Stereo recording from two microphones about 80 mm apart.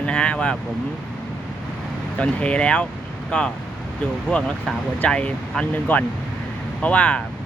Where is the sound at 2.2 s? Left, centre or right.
Centre.